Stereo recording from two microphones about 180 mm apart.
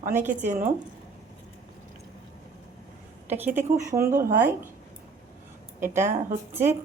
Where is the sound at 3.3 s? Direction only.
10° right (ahead or behind).